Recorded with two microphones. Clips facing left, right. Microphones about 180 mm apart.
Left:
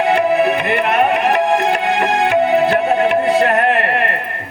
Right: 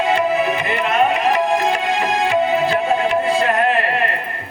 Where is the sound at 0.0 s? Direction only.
60° left (ahead or behind).